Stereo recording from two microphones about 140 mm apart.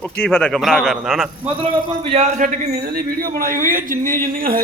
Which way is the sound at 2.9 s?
90° right.